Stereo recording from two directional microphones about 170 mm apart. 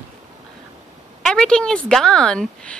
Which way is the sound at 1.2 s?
5° left (ahead or behind).